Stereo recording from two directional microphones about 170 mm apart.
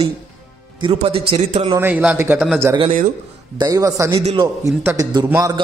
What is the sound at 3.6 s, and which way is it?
A man's voice, 20° right (ahead or behind).